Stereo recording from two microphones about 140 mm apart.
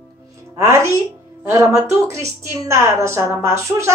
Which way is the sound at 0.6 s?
20° right (ahead or behind).